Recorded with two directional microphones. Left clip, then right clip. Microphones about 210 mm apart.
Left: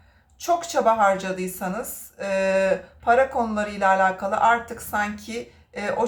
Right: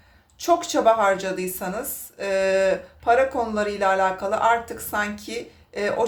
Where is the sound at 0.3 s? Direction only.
25° right (ahead or behind).